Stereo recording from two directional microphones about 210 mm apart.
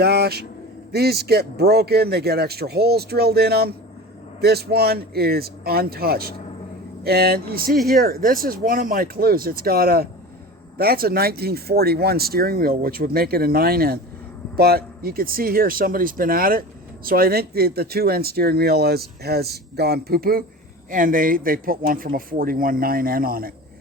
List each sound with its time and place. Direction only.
0.0 s a man's voice: 50° right (ahead or behind)